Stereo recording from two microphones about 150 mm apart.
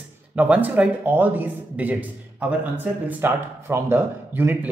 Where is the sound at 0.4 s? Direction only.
10° right (ahead or behind).